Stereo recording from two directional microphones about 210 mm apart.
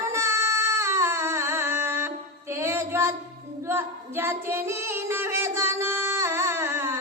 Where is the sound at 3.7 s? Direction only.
10° right (ahead or behind).